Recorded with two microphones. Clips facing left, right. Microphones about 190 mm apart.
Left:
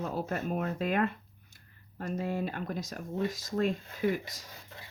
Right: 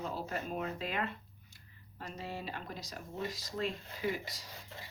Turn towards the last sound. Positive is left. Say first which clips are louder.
# left 6 dB
turn(degrees=50)  # may be behind; listen again after turning